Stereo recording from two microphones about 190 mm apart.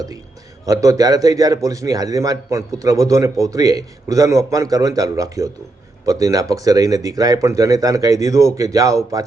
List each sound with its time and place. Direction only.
0.6 s a man's voice: 20° right (ahead or behind)